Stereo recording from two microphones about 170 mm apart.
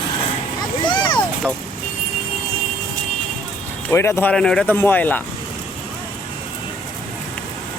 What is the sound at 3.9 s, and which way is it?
Speech, 15° left (ahead or behind).